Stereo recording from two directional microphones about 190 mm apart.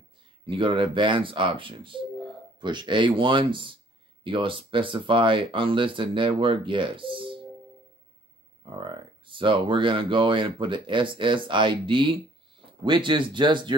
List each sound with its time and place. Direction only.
0.5 s speech: 25° right (ahead or behind)
8.7 s speech: 25° right (ahead or behind)